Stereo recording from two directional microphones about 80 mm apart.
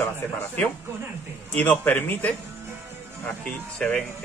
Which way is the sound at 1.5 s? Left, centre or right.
Left.